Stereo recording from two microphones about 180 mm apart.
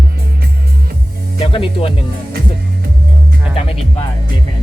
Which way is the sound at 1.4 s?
30° left (ahead or behind).